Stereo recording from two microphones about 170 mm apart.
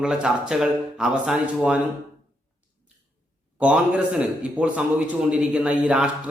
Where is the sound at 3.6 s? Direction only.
5° right (ahead or behind).